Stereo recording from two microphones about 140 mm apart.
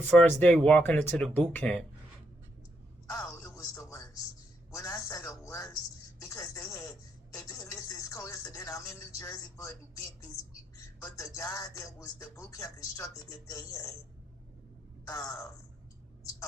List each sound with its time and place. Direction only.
0.1 s speech: 10° left (ahead or behind)
3.1 s music: 20° left (ahead or behind)
4.7 s a sound: 20° left (ahead or behind)
6.2 s music: 20° left (ahead or behind)
10.8 s a sound: 20° left (ahead or behind)
11.3 s music: 25° left (ahead or behind)
15.0 s music: 20° left (ahead or behind)